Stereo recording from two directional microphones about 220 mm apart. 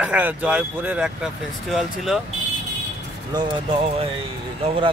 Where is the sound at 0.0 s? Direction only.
5° right (ahead or behind).